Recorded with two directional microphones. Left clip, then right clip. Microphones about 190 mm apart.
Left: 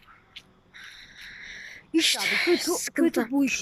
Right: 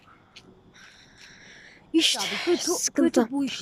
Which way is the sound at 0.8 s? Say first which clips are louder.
Left 6 dB; 10° right (ahead or behind).